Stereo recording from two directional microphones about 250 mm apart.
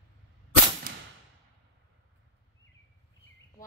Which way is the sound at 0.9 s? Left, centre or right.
Right.